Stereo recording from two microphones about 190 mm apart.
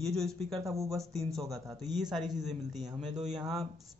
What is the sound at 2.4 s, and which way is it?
Speech, centre (ahead or behind).